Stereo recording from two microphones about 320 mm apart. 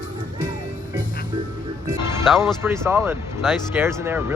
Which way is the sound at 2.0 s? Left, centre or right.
Centre.